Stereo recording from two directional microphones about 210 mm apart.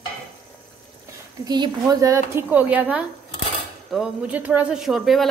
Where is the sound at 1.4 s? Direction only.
20° right (ahead or behind).